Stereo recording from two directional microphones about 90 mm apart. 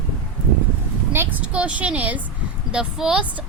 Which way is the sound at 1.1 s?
20° right (ahead or behind).